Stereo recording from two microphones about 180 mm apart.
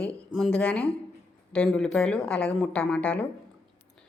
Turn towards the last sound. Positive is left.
turn(degrees=5)  # may be behind; listen again after turning